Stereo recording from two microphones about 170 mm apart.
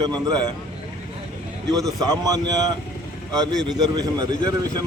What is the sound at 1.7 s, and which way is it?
Speech, 20° right (ahead or behind).